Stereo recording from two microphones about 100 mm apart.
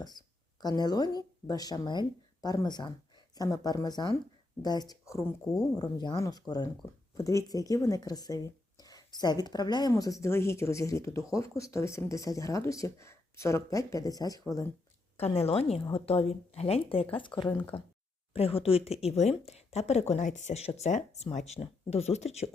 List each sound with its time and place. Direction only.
0.0 s speech: 45° left (ahead or behind)
7.2 s speech: 35° left (ahead or behind)
9.9 s speech: 30° left (ahead or behind)
15.2 s a woman's voice: 90° left; by 17.6 s 50° left (ahead or behind)
18.3 s speech: 75° left (ahead or behind); by 22.4 s 90° left